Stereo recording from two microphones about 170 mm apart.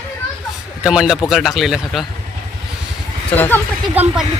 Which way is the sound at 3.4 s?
10° left (ahead or behind).